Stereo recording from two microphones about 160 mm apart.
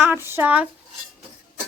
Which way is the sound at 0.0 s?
15° right (ahead or behind).